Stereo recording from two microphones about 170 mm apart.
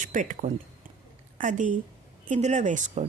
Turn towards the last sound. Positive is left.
turn(degrees=-45)  # may be behind; listen again after turning